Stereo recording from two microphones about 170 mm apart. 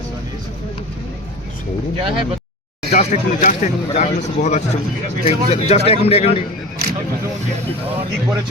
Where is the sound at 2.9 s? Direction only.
45° left (ahead or behind).